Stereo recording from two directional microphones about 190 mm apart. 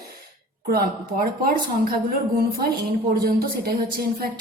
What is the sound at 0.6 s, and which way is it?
Speech, 50° right (ahead or behind).